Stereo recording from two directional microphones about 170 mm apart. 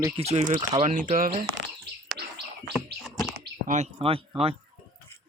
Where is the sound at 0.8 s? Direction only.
50° right (ahead or behind).